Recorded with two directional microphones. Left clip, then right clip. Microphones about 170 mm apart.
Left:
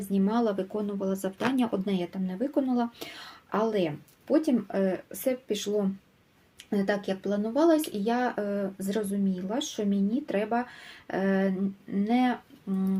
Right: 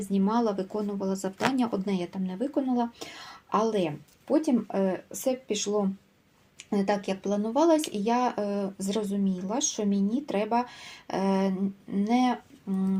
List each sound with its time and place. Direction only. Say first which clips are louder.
0.1 s speech: even; centre (ahead or behind)